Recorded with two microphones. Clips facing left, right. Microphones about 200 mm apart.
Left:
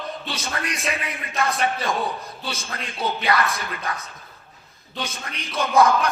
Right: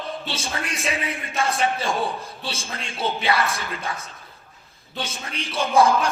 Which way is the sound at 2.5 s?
30° right (ahead or behind).